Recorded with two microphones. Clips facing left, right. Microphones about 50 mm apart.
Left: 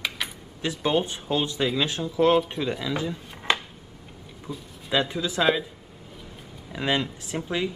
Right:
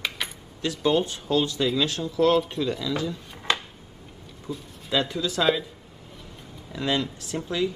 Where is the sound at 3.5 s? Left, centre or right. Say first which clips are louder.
Left 1 dB; centre.